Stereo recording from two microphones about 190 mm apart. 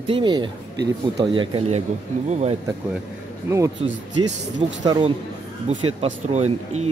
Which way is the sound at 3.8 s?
30° right (ahead or behind).